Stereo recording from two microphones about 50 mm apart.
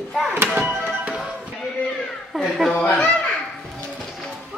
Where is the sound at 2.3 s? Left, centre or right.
Centre.